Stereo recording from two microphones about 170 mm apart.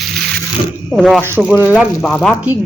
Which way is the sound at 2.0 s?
5° left (ahead or behind).